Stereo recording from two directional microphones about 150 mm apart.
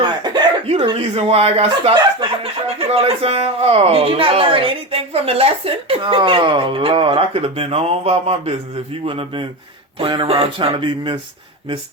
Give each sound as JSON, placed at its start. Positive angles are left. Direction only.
{"t": 0.0, "sound": "a sound", "side_deg": -30}
{"t": 0.9, "sound": "speech", "side_deg": -45}
{"t": 9.0, "sound": "speech", "side_deg": -35}